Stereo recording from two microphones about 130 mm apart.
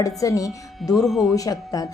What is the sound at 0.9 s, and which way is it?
Speech, centre (ahead or behind).